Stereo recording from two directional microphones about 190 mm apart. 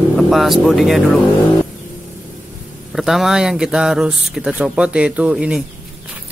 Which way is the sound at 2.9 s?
Centre (ahead or behind).